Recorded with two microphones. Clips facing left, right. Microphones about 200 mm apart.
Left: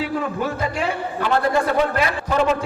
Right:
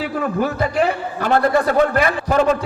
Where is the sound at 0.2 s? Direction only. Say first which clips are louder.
Right 4 dB; 50° right (ahead or behind).